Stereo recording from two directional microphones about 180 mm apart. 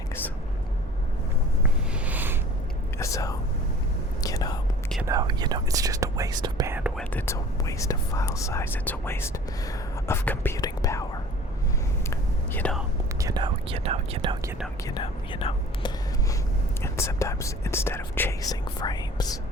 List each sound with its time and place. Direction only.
1.9 s a sound: 10° right (ahead or behind)
3.0 s whispering: 20° left (ahead or behind)
5.0 s speech: 20° right (ahead or behind)
6.9 s speech: 10° left (ahead or behind)
12.1 s whispering: 10° left (ahead or behind)
13.1 s whispering: 20° right (ahead or behind)
14.8 s speech: 25° left (ahead or behind)
16.8 s speech: 15° left (ahead or behind)
18.8 s speech: 25° left (ahead or behind)